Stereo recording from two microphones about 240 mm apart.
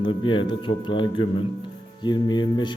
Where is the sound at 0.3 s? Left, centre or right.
Centre.